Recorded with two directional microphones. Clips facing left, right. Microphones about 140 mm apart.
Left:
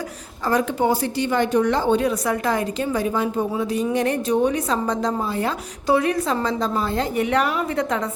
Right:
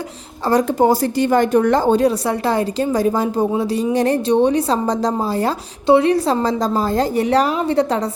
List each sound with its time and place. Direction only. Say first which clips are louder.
0.5 s a woman's voice: right 5 dB; 40° right (ahead or behind)